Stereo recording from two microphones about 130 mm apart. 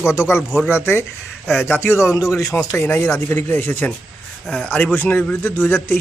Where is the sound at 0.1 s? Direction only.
20° left (ahead or behind).